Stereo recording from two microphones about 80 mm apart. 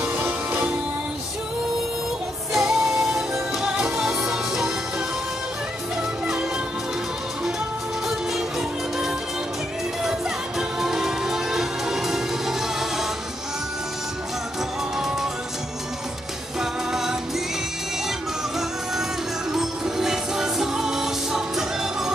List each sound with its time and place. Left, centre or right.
0.0 s music: centre
2.5 s music: centre
8.1 s music: centre
10.8 s music: centre
16.5 s music: centre
19.5 s music: centre